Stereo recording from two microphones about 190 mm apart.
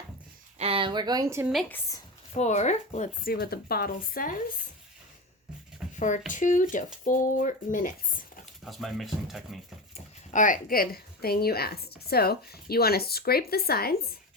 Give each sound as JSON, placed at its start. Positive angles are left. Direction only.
{"t": 0.6, "sound": "speech", "side_deg": -30}
{"t": 2.4, "sound": "speech", "side_deg": 35}
{"t": 3.3, "sound": "speech", "side_deg": 55}
{"t": 6.0, "sound": "speech", "side_deg": 40}
{"t": 8.6, "sound": "speech", "side_deg": 0}
{"t": 9.9, "sound": "speech", "side_deg": 40}